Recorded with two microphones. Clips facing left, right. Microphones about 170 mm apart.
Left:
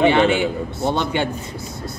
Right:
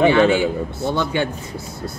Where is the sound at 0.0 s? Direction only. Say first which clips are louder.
Right 1 dB; 20° left (ahead or behind).